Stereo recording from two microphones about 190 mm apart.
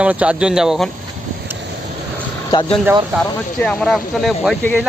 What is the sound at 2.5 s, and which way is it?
Speech, 25° left (ahead or behind).